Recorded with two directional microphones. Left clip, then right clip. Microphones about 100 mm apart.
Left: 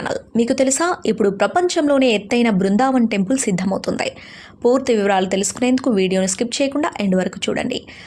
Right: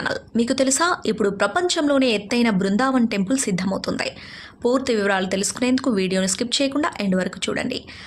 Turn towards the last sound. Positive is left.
turn(degrees=35)  # may be behind; listen again after turning